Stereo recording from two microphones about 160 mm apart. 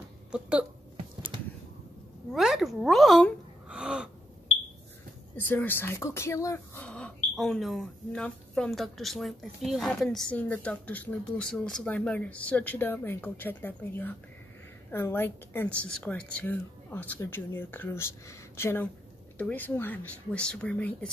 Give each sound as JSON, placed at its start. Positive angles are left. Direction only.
{"t": 0.3, "sound": "speech", "side_deg": -5}
{"t": 2.3, "sound": "a woman's voice", "side_deg": 0}
{"t": 3.6, "sound": "gasp", "side_deg": -5}
{"t": 5.3, "sound": "speech", "side_deg": 10}